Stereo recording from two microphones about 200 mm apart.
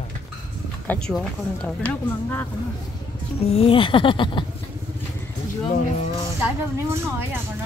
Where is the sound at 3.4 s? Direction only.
30° left (ahead or behind).